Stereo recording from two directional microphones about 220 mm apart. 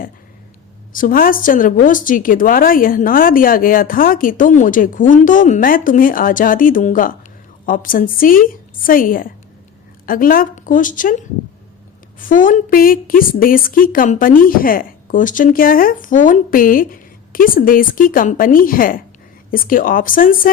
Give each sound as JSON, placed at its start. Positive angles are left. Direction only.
{"t": 0.9, "sound": "a woman's voice", "side_deg": 40}
{"t": 12.3, "sound": "a woman's voice", "side_deg": 35}